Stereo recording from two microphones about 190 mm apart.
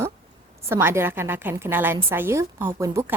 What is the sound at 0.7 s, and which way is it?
A woman's voice, 10° right (ahead or behind).